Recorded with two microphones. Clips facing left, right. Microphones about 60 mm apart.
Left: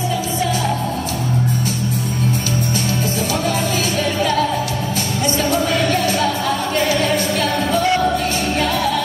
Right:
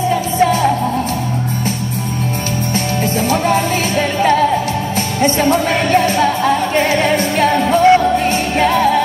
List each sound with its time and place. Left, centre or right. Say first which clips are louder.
0.4 s music: right 9 dB; right
4.2 s music: right 7 dB; right